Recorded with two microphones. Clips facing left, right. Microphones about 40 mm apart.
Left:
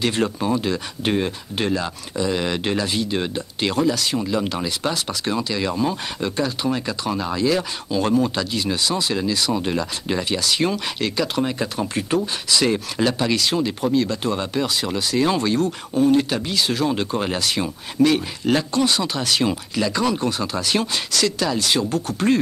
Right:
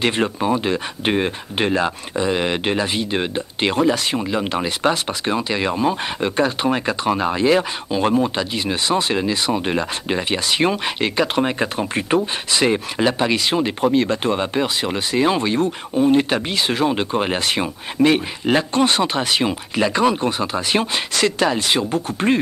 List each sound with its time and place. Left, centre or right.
0.0 s speech: right